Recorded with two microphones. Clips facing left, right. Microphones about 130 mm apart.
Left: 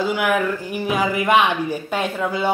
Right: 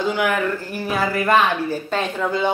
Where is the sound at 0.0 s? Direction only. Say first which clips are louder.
Left 1 dB; 5° left (ahead or behind).